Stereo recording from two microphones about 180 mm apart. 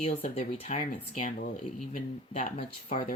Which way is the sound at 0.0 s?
35° left (ahead or behind).